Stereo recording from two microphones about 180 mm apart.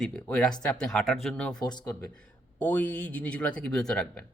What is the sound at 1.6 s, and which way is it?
Speech, 25° left (ahead or behind).